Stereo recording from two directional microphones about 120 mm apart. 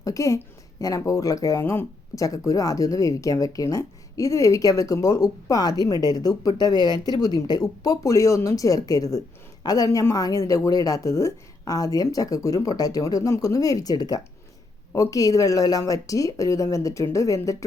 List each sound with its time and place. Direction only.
0.0 s speech: 30° left (ahead or behind)